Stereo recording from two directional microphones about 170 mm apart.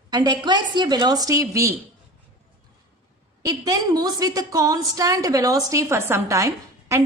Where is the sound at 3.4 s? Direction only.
20° right (ahead or behind).